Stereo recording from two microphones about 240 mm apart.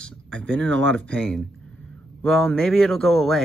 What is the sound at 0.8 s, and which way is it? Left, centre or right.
Speech, right.